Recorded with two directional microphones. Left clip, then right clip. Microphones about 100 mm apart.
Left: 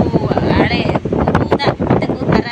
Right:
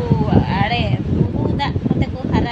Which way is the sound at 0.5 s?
25° right (ahead or behind).